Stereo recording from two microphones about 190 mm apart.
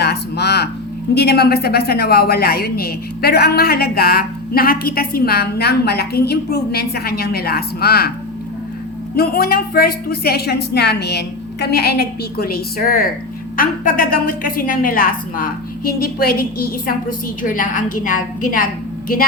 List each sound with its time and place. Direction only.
0.0 s a sound: 60° left (ahead or behind)
1.1 s a woman's voice: 55° left (ahead or behind)
9.1 s a woman's voice: 50° left (ahead or behind)